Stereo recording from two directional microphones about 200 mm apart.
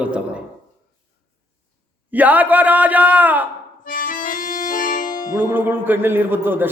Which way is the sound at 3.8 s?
45° left (ahead or behind).